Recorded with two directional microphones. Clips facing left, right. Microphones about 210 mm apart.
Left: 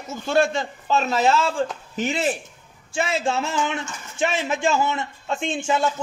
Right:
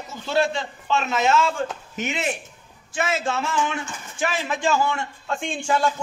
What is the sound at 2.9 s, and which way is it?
Speech, 25° left (ahead or behind).